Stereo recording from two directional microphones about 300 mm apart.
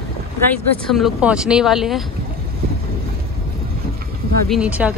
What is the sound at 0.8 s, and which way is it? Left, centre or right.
Speech, centre.